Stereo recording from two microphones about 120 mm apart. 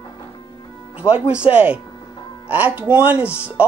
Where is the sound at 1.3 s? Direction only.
10° right (ahead or behind).